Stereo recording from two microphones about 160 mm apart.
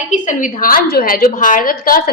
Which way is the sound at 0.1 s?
55° left (ahead or behind).